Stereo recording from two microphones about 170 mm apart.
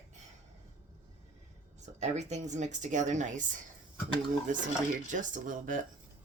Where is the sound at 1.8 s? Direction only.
40° right (ahead or behind).